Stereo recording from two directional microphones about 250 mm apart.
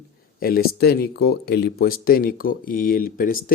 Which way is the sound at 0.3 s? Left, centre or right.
Left.